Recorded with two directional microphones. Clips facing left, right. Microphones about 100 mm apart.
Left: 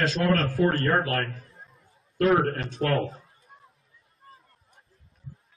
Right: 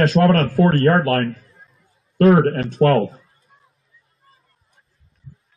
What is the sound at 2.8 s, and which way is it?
Speech, 55° right (ahead or behind).